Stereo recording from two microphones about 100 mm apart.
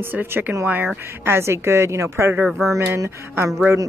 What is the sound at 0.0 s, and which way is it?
A woman's voice, 20° right (ahead or behind).